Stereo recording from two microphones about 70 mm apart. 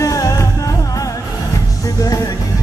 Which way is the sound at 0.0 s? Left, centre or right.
Left.